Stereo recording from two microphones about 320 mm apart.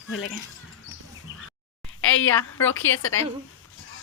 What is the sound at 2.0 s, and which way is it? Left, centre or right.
Speech, left.